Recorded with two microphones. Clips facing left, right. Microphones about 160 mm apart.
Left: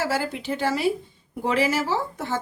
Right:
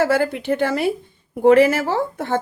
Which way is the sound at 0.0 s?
60° right (ahead or behind).